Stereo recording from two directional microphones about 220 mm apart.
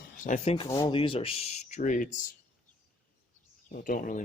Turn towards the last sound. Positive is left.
turn(degrees=35)  # may be behind; listen again after turning